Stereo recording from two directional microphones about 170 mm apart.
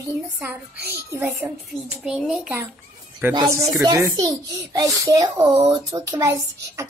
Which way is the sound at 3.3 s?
20° right (ahead or behind).